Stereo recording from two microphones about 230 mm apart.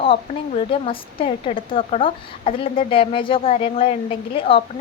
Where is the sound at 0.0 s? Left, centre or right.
Left.